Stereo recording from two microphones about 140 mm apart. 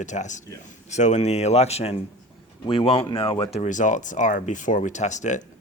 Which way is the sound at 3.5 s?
60° left (ahead or behind).